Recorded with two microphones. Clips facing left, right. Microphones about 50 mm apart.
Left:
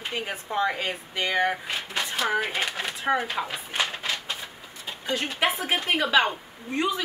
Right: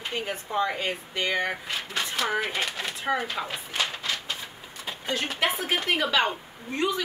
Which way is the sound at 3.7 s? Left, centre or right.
Left.